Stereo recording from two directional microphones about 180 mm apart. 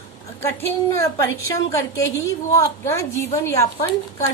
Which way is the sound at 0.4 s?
15° left (ahead or behind).